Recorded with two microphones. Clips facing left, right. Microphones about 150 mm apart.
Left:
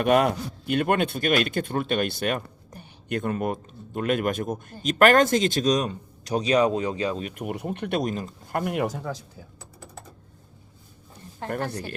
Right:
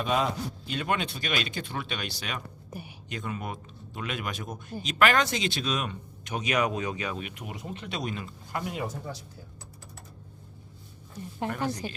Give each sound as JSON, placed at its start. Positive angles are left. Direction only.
{"t": 0.0, "sound": "speech", "side_deg": 65}
{"t": 2.6, "sound": "a sound", "side_deg": -10}
{"t": 3.1, "sound": "a man's voice", "side_deg": 55}
{"t": 7.3, "sound": "speech", "side_deg": 60}
{"t": 8.6, "sound": "speech", "side_deg": 65}